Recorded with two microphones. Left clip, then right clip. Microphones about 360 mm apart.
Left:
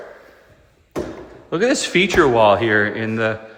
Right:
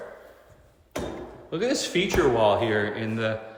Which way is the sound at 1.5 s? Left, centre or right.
Left.